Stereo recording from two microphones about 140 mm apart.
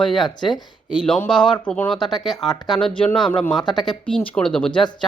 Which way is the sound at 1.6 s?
10° left (ahead or behind).